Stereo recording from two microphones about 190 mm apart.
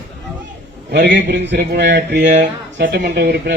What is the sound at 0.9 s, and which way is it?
Speech, 65° right (ahead or behind).